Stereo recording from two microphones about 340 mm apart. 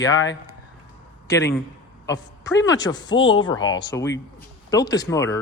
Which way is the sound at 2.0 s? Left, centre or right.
Centre.